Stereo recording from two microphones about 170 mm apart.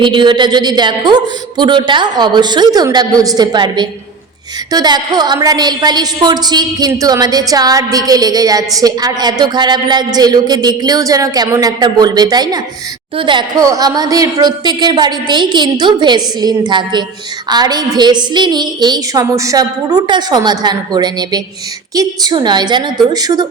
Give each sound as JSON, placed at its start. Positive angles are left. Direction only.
{"t": 0.0, "sound": "a woman's voice", "side_deg": -30}